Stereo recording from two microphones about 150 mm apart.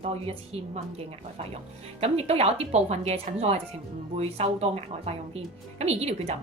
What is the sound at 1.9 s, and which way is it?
Speech, 45° right (ahead or behind).